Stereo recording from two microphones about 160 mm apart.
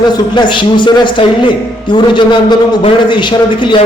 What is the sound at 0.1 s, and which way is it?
A man's voice, 30° left (ahead or behind).